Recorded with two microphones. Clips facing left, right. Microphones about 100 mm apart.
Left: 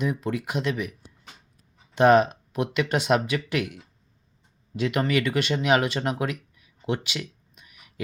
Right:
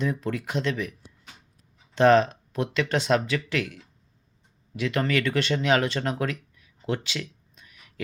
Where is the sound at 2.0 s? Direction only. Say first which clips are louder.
Left 1 dB; 15° left (ahead or behind).